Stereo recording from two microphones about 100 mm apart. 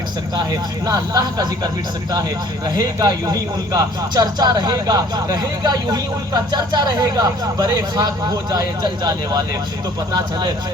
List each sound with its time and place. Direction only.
0.9 s speech: 40° right (ahead or behind)